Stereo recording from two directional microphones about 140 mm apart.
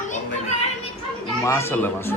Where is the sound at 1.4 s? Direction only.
20° left (ahead or behind).